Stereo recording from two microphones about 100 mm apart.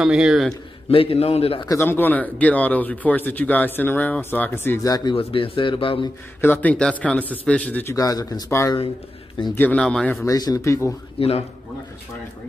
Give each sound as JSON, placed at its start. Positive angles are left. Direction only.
{"t": 0.0, "sound": "a man's voice", "side_deg": -5}
{"t": 0.8, "sound": "a man's voice", "side_deg": 75}
{"t": 1.7, "sound": "speech", "side_deg": 25}
{"t": 4.8, "sound": "speech", "side_deg": 40}
{"t": 5.1, "sound": "speech", "side_deg": 65}
{"t": 6.4, "sound": "speech", "side_deg": 20}
{"t": 7.8, "sound": "speech", "side_deg": 35}
{"t": 8.5, "sound": "speech", "side_deg": 25}
{"t": 9.4, "sound": "a man's voice", "side_deg": 55}
{"t": 9.8, "sound": "speech", "side_deg": 10}
{"t": 10.2, "sound": "speech", "side_deg": 35}
{"t": 11.1, "sound": "speech", "side_deg": 80}